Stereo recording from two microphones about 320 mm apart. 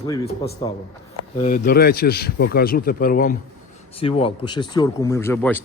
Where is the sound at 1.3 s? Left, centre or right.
Left; by 5.6 s centre.